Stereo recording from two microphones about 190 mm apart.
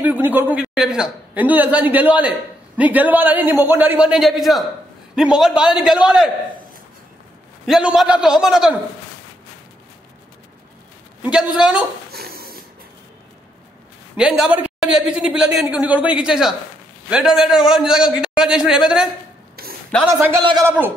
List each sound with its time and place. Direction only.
0.0 s a man's voice: 10° right (ahead or behind)
7.6 s a woman's voice: centre (ahead or behind)
11.2 s a woman's voice: 5° right (ahead or behind)
12.1 s a sound: 55° right (ahead or behind)
14.1 s a woman's voice: 5° right (ahead or behind)
20.4 s a man's voice: 20° right (ahead or behind)